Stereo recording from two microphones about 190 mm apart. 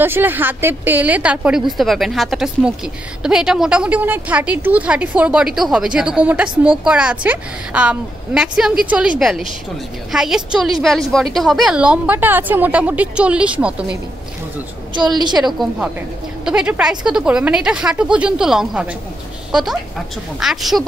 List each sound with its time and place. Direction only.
0.0 s a woman's voice: 10° right (ahead or behind)
15.1 s a woman's voice: 20° right (ahead or behind)
15.4 s a woman's voice: centre (ahead or behind)